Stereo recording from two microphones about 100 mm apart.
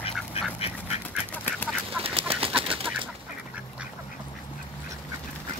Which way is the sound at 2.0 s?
70° right (ahead or behind).